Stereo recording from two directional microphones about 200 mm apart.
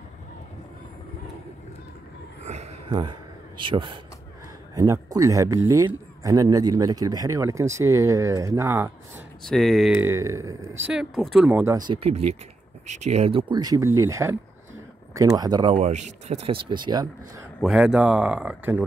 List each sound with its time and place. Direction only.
2.4 s a sound: 35° right (ahead or behind)
3.6 s speech: 25° right (ahead or behind)
9.4 s speech: centre (ahead or behind)
10.0 s speech: 15° right (ahead or behind)
10.9 s speech: centre (ahead or behind)
11.9 s speech: 30° right (ahead or behind)
15.7 s speech: 35° right (ahead or behind)
17.6 s speech: 5° right (ahead or behind)